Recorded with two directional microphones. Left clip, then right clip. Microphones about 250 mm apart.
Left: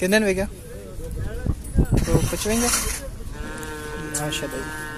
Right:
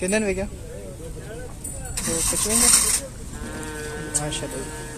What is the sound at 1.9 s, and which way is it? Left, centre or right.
Speech, right.